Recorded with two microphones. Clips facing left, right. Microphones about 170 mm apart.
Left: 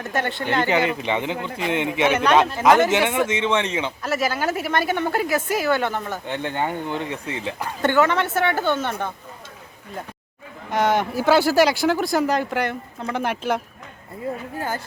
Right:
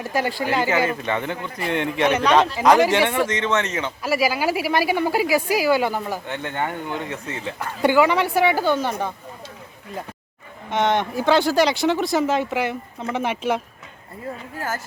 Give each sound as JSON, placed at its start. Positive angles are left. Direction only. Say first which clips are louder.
{"t": 0.0, "sound": "speech", "louder": "right 2 dB", "side_deg": -5}
{"t": 0.7, "sound": "speech", "louder": "left 1 dB", "side_deg": 20}
{"t": 4.0, "sound": "speech", "louder": "right 4 dB", "side_deg": -5}
{"t": 6.2, "sound": "speech", "louder": "left 2 dB", "side_deg": 15}
{"t": 7.8, "sound": "speech", "louder": "right 2 dB", "side_deg": -10}
{"t": 10.7, "sound": "speech", "louder": "even", "side_deg": 0}